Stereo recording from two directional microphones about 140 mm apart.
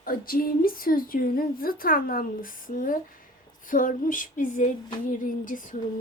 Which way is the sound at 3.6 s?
75° left (ahead or behind).